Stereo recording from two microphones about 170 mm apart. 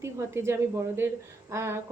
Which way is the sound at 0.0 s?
15° right (ahead or behind).